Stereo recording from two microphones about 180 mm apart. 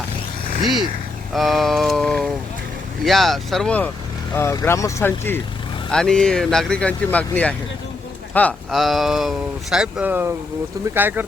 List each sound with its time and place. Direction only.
1.3 s speech: centre (ahead or behind)